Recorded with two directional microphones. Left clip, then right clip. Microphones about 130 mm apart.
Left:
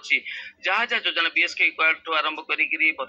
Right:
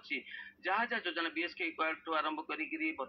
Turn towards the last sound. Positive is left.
turn(degrees=35)  # may be behind; listen again after turning